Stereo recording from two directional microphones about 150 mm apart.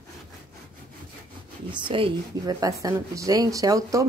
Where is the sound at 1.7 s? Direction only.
30° right (ahead or behind).